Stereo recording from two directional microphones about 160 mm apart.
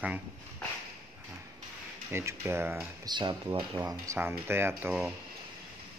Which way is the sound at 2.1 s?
15° right (ahead or behind).